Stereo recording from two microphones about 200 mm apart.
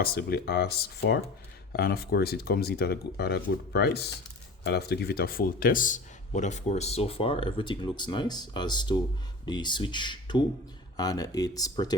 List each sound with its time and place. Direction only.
0.0 s a man's voice: 50° left (ahead or behind); by 11.9 s 20° left (ahead or behind)